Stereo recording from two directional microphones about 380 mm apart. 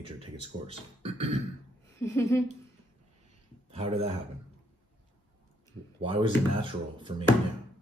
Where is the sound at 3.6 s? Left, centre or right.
Centre.